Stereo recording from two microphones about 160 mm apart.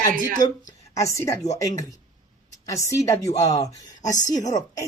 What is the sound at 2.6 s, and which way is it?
Speech, 20° left (ahead or behind).